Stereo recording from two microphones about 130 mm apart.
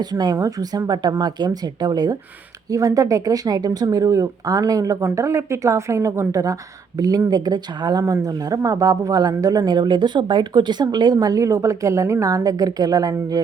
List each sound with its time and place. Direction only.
0.0 s speech: 30° right (ahead or behind)